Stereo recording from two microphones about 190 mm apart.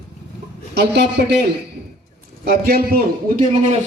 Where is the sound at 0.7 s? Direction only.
60° right (ahead or behind).